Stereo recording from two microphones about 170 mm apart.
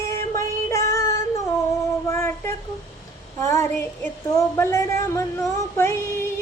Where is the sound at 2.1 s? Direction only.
15° left (ahead or behind).